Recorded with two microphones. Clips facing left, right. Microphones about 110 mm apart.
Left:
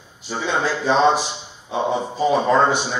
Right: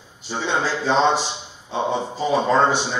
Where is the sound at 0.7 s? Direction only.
15° left (ahead or behind).